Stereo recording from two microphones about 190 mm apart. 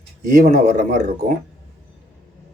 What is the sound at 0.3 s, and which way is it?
Speech, 50° right (ahead or behind).